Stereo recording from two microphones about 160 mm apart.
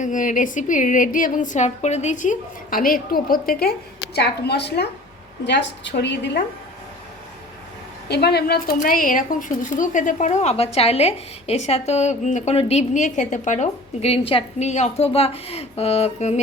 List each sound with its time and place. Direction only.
0.0 s a woman's voice: 55° left (ahead or behind); by 6.4 s 90° left
8.0 s a woman's voice: 90° left; by 16.4 s 40° left (ahead or behind)